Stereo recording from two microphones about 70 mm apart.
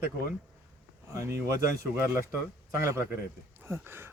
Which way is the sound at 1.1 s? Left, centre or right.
Right.